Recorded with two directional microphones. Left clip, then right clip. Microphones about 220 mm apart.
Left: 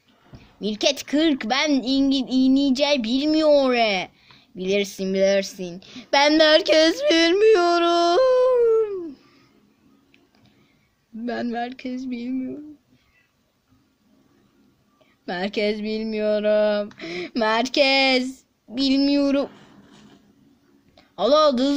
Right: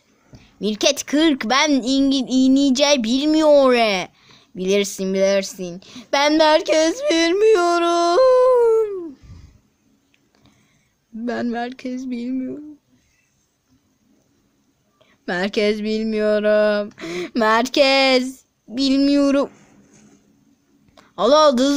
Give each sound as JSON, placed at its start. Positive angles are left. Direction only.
{"t": 0.3, "sound": "speech", "side_deg": -25}
{"t": 11.3, "sound": "speech", "side_deg": -20}
{"t": 15.3, "sound": "speech", "side_deg": -25}
{"t": 19.5, "sound": "a sound", "side_deg": 35}
{"t": 20.9, "sound": "speech", "side_deg": -25}